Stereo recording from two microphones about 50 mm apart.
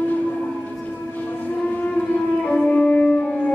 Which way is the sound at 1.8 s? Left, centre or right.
Left.